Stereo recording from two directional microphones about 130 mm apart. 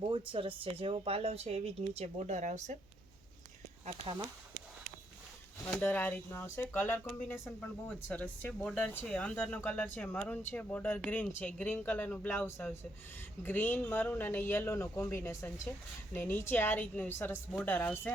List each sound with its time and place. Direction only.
0.0 s speech: 40° right (ahead or behind); by 2.7 s 60° right (ahead or behind)
3.8 s speech: 45° right (ahead or behind)
5.6 s speech: 10° left (ahead or behind)